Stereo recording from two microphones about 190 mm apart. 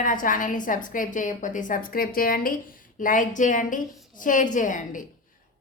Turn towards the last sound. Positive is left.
turn(degrees=40)  # may be behind; listen again after turning